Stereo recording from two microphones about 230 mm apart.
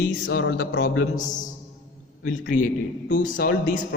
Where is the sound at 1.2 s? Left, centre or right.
Left.